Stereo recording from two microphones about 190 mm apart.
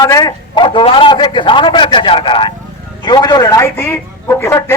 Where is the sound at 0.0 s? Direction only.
20° left (ahead or behind).